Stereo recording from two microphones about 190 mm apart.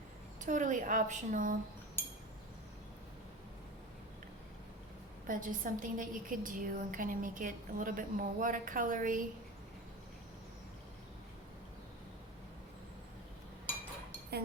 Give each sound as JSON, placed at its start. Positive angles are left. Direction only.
{"t": 0.4, "sound": "a woman's voice", "side_deg": -40}
{"t": 5.2, "sound": "a woman's voice", "side_deg": -45}